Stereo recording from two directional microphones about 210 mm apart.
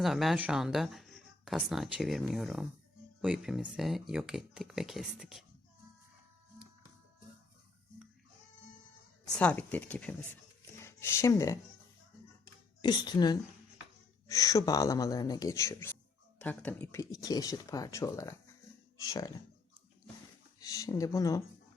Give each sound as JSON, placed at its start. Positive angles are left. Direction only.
{"t": 0.0, "sound": "speech", "side_deg": 0}
{"t": 9.2, "sound": "speech", "side_deg": 5}
{"t": 12.8, "sound": "a woman's voice", "side_deg": 20}
{"t": 20.6, "sound": "speech", "side_deg": 15}